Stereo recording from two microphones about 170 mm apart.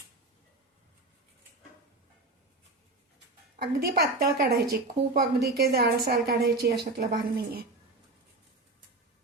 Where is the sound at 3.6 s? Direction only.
70° right (ahead or behind).